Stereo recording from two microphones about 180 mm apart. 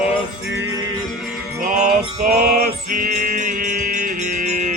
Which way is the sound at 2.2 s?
55° right (ahead or behind).